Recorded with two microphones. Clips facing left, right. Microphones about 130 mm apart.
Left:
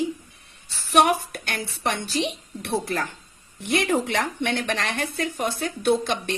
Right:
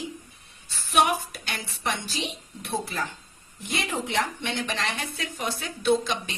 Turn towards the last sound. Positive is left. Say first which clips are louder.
# left 2 dB
turn(degrees=55)  # may be behind; listen again after turning